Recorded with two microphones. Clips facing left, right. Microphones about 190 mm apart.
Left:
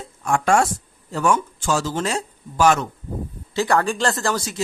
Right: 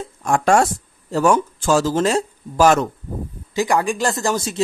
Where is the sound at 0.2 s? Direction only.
40° right (ahead or behind).